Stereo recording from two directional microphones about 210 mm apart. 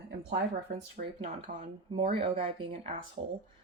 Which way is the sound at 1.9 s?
25° right (ahead or behind).